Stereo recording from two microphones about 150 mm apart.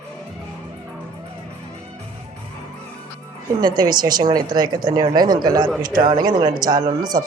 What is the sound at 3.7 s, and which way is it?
Speech, 30° right (ahead or behind).